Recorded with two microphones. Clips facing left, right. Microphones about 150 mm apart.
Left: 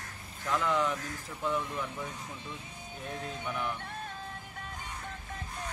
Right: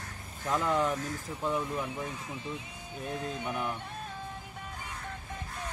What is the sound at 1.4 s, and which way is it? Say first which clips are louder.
Speech: right 1 dB; 15° right (ahead or behind).